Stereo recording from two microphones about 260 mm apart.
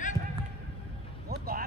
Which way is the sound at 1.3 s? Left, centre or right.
Right.